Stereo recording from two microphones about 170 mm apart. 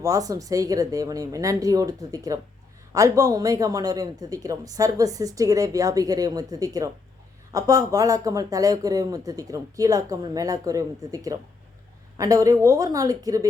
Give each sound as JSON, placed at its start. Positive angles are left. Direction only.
{"t": 0.0, "sound": "speech", "side_deg": -20}